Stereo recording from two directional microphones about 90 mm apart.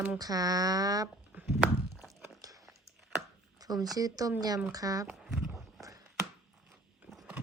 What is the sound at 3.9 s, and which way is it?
A woman's voice, 45° right (ahead or behind).